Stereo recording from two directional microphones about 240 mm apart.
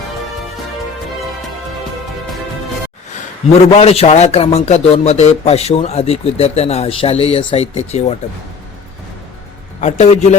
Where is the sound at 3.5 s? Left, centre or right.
Left.